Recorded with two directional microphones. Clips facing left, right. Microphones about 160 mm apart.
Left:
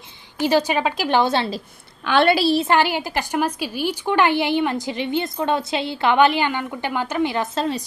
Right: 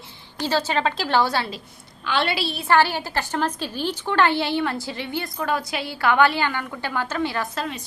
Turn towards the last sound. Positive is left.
turn(degrees=30)  # may be behind; listen again after turning